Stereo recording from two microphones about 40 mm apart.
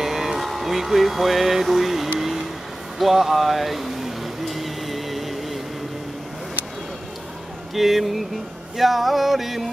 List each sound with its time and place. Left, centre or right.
0.0 s a sound: centre
2.1 s vehicle: centre
3.0 s music: centre
7.7 s music: centre